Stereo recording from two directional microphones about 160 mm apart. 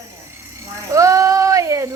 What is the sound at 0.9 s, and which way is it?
Speech, 20° right (ahead or behind).